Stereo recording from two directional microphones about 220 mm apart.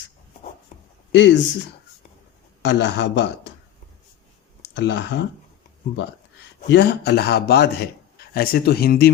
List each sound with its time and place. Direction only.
1.1 s speech: 55° left (ahead or behind)
2.6 s speech: 55° left (ahead or behind)
4.7 s speech: 55° left (ahead or behind)
6.7 s speech: 50° left (ahead or behind)